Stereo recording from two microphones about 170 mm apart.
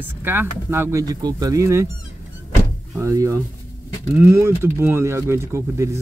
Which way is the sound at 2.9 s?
15° right (ahead or behind).